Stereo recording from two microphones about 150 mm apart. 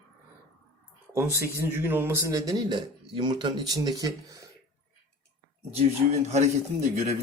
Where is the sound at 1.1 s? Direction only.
15° right (ahead or behind).